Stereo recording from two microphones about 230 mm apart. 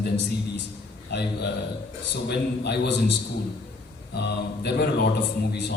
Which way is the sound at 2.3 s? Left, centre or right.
Left.